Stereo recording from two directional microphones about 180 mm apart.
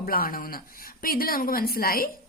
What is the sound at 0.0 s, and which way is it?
A woman's voice, 55° left (ahead or behind).